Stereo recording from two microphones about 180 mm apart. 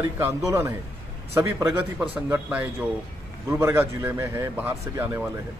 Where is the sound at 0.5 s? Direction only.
15° right (ahead or behind).